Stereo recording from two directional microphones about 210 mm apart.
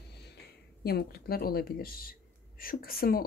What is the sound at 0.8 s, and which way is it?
Speech, 50° left (ahead or behind).